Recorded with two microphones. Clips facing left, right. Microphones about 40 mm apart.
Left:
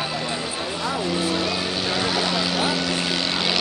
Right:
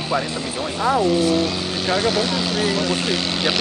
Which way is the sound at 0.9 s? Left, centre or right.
Centre.